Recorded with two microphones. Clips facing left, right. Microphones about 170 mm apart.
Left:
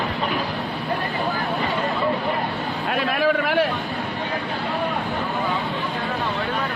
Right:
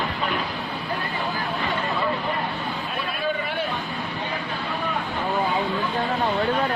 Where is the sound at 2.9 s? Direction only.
80° left.